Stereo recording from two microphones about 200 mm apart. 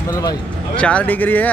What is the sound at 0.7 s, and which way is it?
Speech, 5° left (ahead or behind).